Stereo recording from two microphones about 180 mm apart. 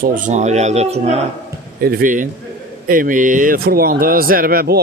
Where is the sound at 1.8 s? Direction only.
50° right (ahead or behind).